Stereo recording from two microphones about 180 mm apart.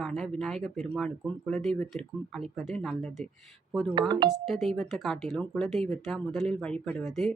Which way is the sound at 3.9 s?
25° right (ahead or behind).